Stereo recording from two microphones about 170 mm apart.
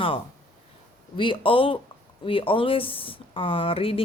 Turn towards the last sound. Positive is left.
turn(degrees=35)  # may be behind; listen again after turning